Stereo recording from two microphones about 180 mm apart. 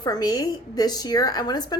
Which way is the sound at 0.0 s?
20° left (ahead or behind).